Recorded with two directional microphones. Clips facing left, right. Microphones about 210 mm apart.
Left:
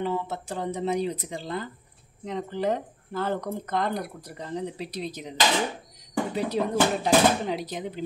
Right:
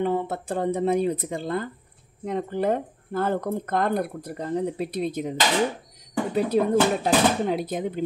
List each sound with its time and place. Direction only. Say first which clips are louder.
0.0 s speech: right 4 dB; 55° right (ahead or behind)
6.3 s speech: right 6 dB; 50° right (ahead or behind)